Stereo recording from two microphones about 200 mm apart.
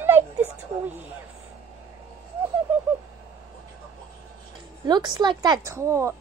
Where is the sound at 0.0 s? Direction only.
10° right (ahead or behind).